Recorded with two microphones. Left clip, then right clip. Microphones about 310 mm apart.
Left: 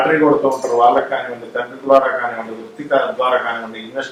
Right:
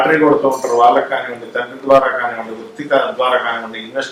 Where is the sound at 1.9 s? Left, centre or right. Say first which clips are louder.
Right 1 dB; left.